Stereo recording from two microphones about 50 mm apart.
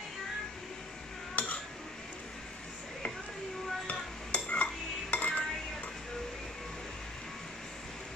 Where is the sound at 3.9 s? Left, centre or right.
Left.